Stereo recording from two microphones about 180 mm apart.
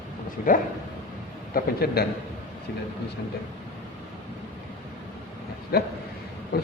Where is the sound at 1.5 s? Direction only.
60° left (ahead or behind).